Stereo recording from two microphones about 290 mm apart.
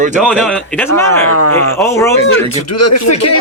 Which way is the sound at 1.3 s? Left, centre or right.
Right.